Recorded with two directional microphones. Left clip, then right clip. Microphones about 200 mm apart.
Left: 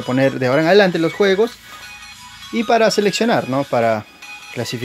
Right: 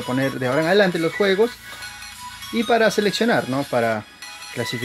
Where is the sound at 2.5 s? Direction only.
25° left (ahead or behind).